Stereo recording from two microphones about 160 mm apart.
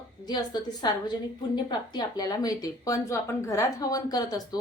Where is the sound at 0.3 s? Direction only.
25° left (ahead or behind).